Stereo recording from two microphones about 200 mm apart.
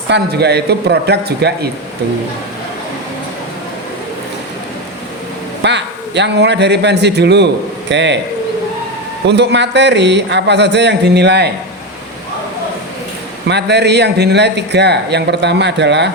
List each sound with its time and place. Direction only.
0.1 s a man's voice: 55° right (ahead or behind)
5.6 s a man's voice: 60° right (ahead or behind)
9.2 s a man's voice: 60° right (ahead or behind)
13.5 s a man's voice: 55° right (ahead or behind)